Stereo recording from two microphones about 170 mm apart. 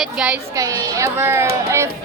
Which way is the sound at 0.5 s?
20° right (ahead or behind).